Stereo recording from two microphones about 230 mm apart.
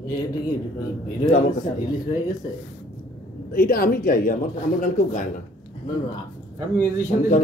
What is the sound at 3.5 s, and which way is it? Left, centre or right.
Speech, left.